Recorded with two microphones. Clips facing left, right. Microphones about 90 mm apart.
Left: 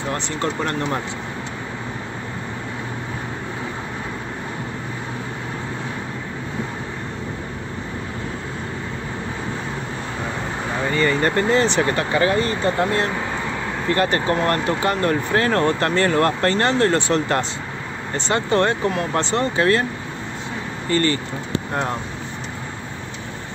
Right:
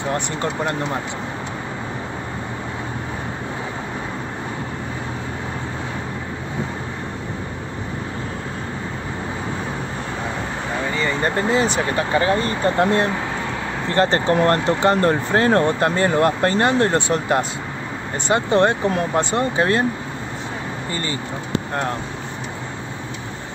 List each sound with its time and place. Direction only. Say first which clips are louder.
11.0 s speech: left 3 dB; 10° right (ahead or behind)
12.2 s speech: even; 25° right (ahead or behind)
20.9 s speech: left 9 dB; 15° right (ahead or behind)